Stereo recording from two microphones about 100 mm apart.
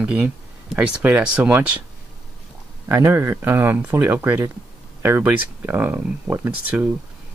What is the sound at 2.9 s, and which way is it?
Speech, 25° right (ahead or behind).